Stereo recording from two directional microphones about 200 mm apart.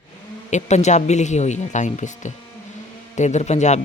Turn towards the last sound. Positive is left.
turn(degrees=35)  # may be behind; listen again after turning